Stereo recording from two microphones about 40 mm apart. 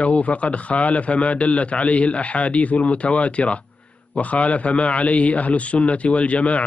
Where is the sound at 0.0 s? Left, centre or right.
Left.